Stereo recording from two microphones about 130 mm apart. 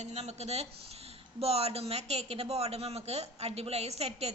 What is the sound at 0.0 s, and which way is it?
A woman's voice, 55° right (ahead or behind).